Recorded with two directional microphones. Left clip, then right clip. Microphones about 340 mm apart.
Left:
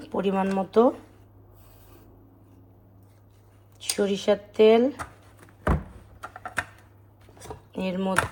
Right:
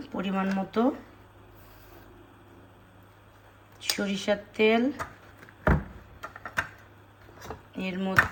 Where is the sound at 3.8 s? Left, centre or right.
Centre.